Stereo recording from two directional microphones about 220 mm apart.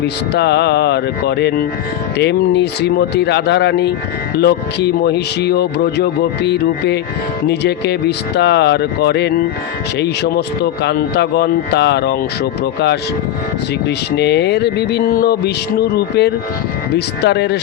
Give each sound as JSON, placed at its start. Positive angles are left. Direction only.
{"t": 0.0, "sound": "speech", "side_deg": 50}
{"t": 13.8, "sound": "speech", "side_deg": 50}